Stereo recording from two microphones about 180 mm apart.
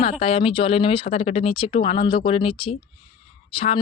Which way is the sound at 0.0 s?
35° left (ahead or behind).